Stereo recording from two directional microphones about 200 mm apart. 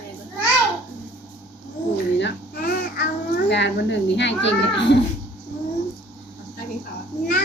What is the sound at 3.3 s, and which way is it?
A child's voice, 60° left (ahead or behind).